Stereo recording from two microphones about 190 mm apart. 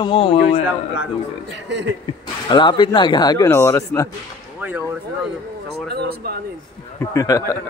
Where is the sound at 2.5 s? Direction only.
25° left (ahead or behind).